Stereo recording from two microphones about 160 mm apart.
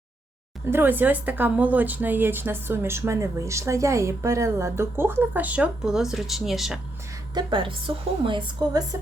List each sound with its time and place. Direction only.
0.7 s speech: 10° right (ahead or behind)
7.3 s a woman's voice: 30° right (ahead or behind)